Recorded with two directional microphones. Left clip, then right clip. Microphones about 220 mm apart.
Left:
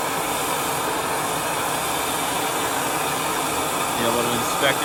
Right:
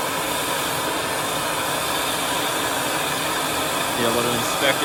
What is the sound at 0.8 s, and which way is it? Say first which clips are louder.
Vehicle: even; 20° left (ahead or behind).